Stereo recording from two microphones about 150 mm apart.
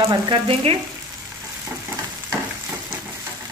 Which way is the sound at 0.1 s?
35° right (ahead or behind).